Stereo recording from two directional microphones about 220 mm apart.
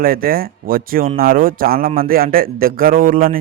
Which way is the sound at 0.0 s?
40° right (ahead or behind).